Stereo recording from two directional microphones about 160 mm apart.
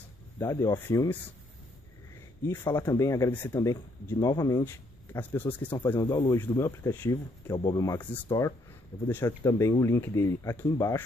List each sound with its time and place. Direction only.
0.4 s speech: 20° left (ahead or behind)
2.6 s speech: 20° left (ahead or behind)
5.9 s speech: 20° left (ahead or behind)